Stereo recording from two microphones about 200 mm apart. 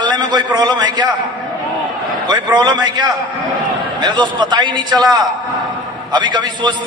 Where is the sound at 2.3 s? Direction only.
20° right (ahead or behind).